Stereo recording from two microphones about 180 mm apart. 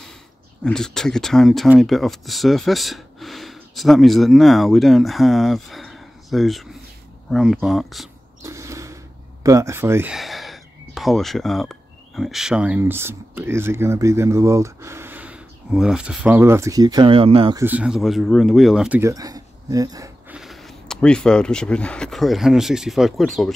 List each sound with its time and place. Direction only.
0.7 s speech: 5° left (ahead or behind)
8.4 s a sound: 15° right (ahead or behind)
9.4 s speech: 15° right (ahead or behind)
10.1 s speech: centre (ahead or behind); by 17.6 s 30° right (ahead or behind)
17.6 s speech: 10° right (ahead or behind)
20.2 s speech: centre (ahead or behind)